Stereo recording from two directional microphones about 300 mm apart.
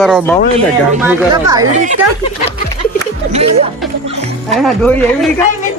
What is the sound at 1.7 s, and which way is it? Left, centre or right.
Speech, right.